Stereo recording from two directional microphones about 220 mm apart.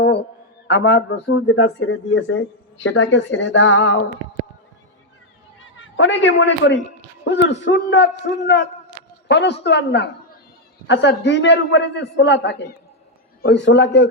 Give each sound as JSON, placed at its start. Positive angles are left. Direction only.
{"t": 0.7, "sound": "speech", "side_deg": 55}
{"t": 5.5, "sound": "a man's voice", "side_deg": 60}